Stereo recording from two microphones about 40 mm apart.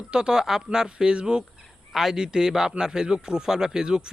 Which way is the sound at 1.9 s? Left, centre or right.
Centre.